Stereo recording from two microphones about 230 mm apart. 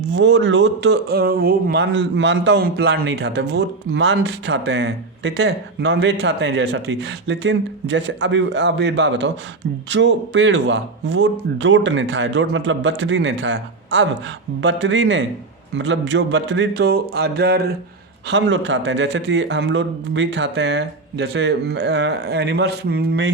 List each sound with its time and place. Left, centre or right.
0.1 s speech: right